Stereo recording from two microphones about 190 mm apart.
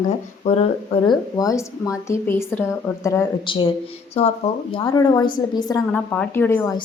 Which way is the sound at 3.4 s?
25° left (ahead or behind).